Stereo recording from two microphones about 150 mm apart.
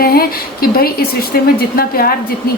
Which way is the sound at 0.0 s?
85° left.